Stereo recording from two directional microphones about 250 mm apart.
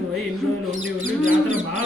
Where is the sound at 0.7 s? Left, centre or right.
Right.